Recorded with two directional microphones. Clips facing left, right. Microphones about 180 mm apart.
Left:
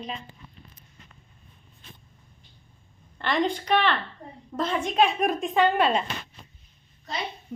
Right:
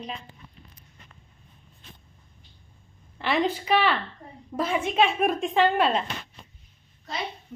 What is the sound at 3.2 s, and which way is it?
A woman's voice, 5° right (ahead or behind).